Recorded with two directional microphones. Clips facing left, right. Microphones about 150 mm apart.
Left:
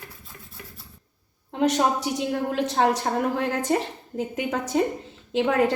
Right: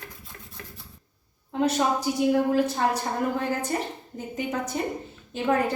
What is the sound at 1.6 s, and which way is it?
A woman's voice, 80° left.